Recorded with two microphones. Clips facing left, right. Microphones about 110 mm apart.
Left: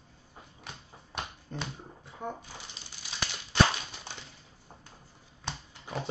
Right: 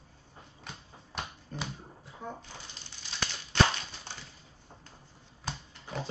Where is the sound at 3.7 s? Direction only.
15° left (ahead or behind).